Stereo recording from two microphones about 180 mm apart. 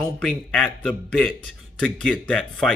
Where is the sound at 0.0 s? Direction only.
5° left (ahead or behind).